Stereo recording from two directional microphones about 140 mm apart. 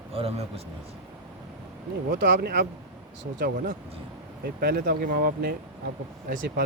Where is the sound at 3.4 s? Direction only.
90° right.